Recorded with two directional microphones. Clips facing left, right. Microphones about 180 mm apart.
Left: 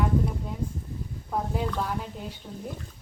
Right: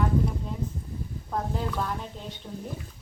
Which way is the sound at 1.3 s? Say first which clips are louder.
Left 1 dB; 10° left (ahead or behind).